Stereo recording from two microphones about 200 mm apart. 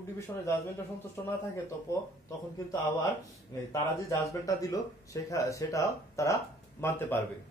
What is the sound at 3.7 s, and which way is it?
A man's voice, 15° left (ahead or behind).